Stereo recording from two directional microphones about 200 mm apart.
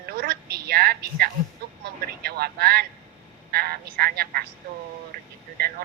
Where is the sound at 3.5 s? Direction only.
50° right (ahead or behind).